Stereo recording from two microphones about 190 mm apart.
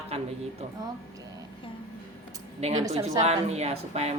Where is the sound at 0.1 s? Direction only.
30° right (ahead or behind).